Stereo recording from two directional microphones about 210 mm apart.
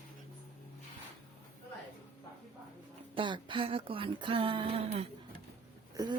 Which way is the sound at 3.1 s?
25° right (ahead or behind).